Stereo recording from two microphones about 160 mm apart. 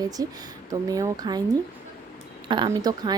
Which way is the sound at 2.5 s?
25° right (ahead or behind).